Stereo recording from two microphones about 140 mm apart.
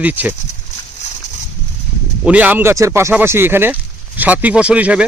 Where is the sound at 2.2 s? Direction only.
10° right (ahead or behind).